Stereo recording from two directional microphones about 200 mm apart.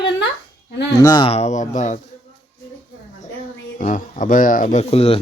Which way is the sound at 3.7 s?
40° left (ahead or behind).